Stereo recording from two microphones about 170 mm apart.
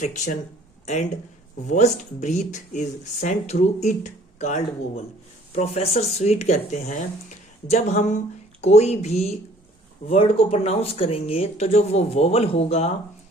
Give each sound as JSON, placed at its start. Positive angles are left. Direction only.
{"t": 0.0, "sound": "speech", "side_deg": 45}
{"t": 1.6, "sound": "speech", "side_deg": 45}